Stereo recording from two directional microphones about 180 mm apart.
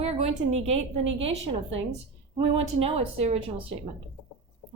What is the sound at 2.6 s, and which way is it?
Speech, 35° right (ahead or behind).